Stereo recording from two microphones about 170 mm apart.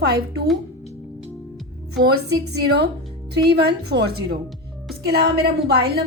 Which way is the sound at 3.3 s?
70° right (ahead or behind).